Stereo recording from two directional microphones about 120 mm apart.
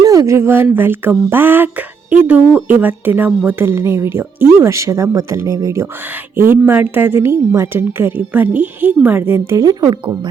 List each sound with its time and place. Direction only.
0.0 s a woman's voice: 30° right (ahead or behind)
9.6 s speech: 30° right (ahead or behind)